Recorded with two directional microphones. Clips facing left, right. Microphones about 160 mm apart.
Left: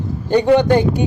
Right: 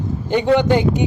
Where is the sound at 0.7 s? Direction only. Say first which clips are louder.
Left 2 dB; 20° right (ahead or behind).